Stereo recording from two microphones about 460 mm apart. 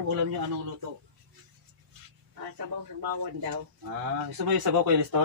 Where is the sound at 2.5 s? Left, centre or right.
Right.